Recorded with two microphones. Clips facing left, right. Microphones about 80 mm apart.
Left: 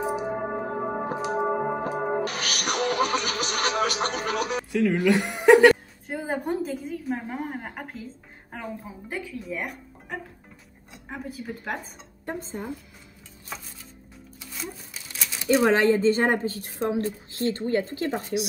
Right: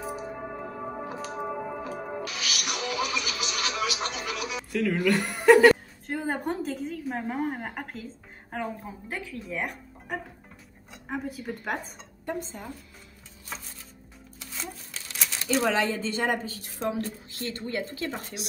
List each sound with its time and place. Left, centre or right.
0.3 s singing bowl: left
1.9 s music: left
4.7 s a woman's voice: centre
12.3 s a woman's voice: left
14.4 s music: centre
15.6 s a woman's voice: left